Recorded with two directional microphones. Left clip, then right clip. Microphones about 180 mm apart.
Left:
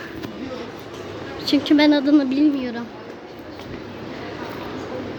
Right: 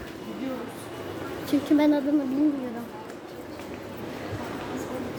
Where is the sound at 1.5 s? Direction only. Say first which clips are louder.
Left 6 dB; 5° left (ahead or behind).